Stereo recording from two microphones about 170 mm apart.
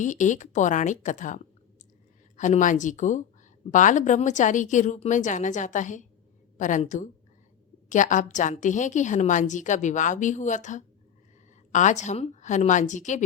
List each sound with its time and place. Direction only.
0.0 s a woman's voice: 45° left (ahead or behind)